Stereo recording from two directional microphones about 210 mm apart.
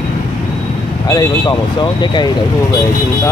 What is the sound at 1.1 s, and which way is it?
Speech, 15° left (ahead or behind).